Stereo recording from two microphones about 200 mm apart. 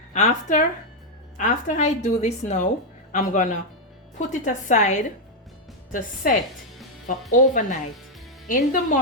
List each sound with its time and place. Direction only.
0.1 s a woman's voice: 35° left (ahead or behind)